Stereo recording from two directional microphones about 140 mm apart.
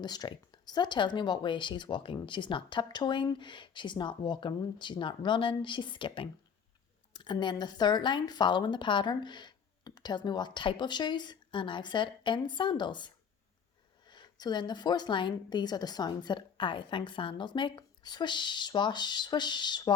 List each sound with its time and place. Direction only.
0.0 s speech: 30° left (ahead or behind)
14.1 s speech: 30° left (ahead or behind)